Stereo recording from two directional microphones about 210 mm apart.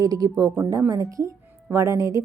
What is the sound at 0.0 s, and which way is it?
A woman's voice, 15° right (ahead or behind).